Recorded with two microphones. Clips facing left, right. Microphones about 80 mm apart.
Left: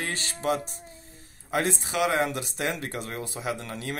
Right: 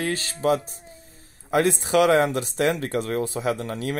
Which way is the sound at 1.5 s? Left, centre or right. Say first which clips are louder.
Right 7 dB; right.